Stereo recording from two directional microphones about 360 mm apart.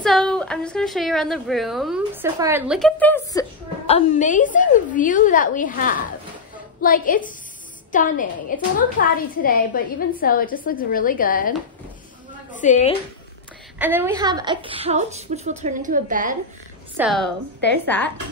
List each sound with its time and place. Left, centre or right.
0.0 s a woman's voice: centre
3.8 s a woman's voice: centre
12.5 s a woman's voice: centre
13.7 s a woman's voice: centre; by 16.3 s right
16.9 s a woman's voice: centre